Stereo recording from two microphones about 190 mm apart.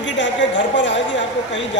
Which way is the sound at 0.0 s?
70° left (ahead or behind).